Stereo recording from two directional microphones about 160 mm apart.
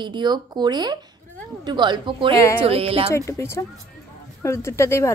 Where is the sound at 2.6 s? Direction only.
35° right (ahead or behind).